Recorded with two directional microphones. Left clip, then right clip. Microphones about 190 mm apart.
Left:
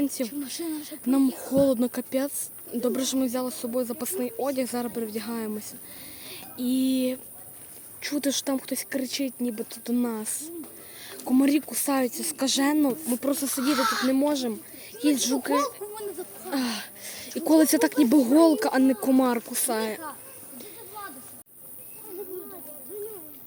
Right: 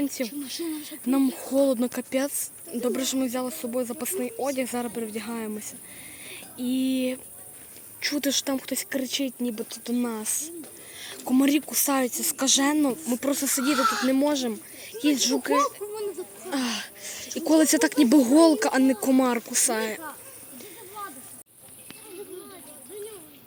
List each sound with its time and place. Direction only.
0.0 s speech: 10° left (ahead or behind)
0.3 s speech: 40° left (ahead or behind)
1.0 s speech: 5° left (ahead or behind)
2.8 s speech: 5° left (ahead or behind)
6.2 s a sound: 5° left (ahead or behind)
8.0 s speech: 5° left (ahead or behind)
9.6 s speech: 10° left (ahead or behind)
13.7 s speech: 30° left (ahead or behind)
14.1 s speech: centre (ahead or behind)
16.0 s a sound: 35° left (ahead or behind)
16.5 s speech: 5° left (ahead or behind)